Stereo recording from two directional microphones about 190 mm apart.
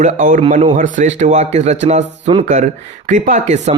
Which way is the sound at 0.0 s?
40° right (ahead or behind).